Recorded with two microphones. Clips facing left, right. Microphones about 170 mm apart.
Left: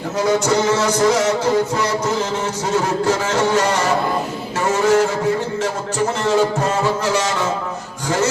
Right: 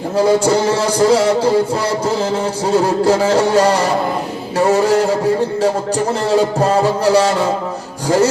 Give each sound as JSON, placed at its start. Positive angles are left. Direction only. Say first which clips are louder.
{"t": 0.2, "sound": "music", "louder": "right 4 dB", "side_deg": -30}
{"t": 6.2, "sound": "music", "louder": "right 3 dB", "side_deg": -35}